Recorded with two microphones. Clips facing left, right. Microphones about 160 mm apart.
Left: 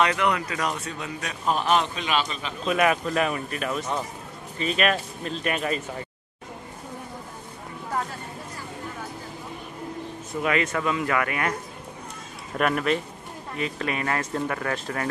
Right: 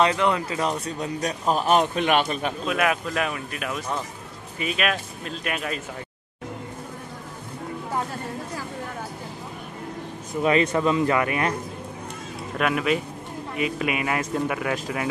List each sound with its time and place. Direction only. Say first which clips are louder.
0.0 s speech: right 2 dB; 30° right (ahead or behind); by 2.5 s 55° right (ahead or behind)
2.6 s speech: left 4 dB; centre (ahead or behind)
10.4 s speech: right 5 dB; 20° right (ahead or behind)
12.5 s speech: even; centre (ahead or behind)